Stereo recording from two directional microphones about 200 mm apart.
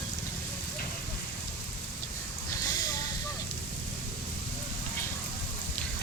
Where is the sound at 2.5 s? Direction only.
20° left (ahead or behind).